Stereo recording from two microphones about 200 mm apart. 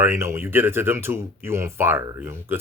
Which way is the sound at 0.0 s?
15° right (ahead or behind).